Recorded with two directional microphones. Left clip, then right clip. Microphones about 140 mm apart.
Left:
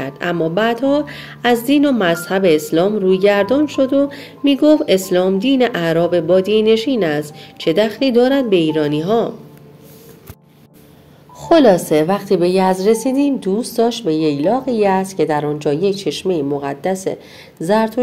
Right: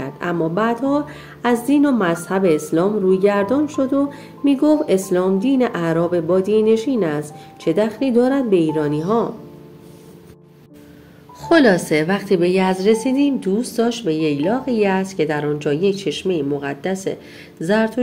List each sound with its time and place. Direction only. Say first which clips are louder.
0.0 s a woman's voice: left 3 dB; 40° left (ahead or behind)
11.4 s a woman's voice: left 3 dB; 25° left (ahead or behind)